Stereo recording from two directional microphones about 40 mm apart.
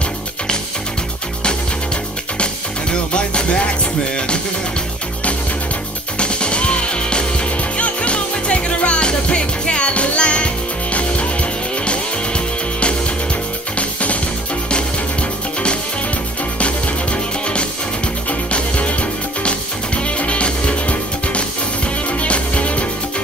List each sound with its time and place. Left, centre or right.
2.4 s music: left
6.1 s music: left
16.5 s music: left